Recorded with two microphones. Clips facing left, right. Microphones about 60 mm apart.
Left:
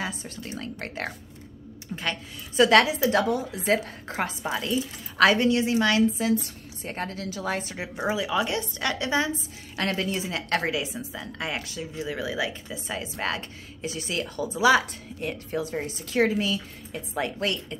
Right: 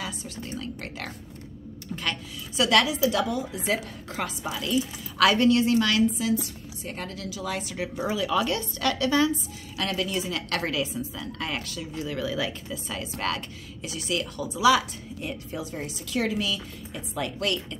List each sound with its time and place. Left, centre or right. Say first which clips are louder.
0.0 s a woman's voice: left 2 dB; left
1.9 s speech: even; centre
2.5 s a woman's voice: left 4 dB; left
7.7 s a woman's voice: left 1 dB; left
15.2 s a woman's voice: left 5 dB; left